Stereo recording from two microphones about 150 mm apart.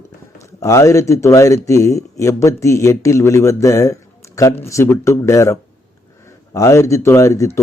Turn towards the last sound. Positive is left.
turn(degrees=20)  # may be behind; listen again after turning